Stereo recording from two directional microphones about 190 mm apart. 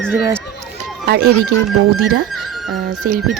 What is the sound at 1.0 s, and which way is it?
Speech, 55° right (ahead or behind).